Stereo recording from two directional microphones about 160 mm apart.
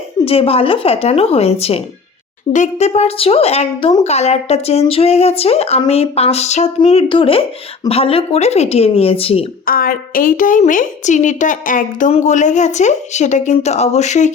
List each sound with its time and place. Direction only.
0.3 s speech: 35° left (ahead or behind)
9.6 s a woman's voice: 65° left (ahead or behind); by 14.3 s 45° left (ahead or behind)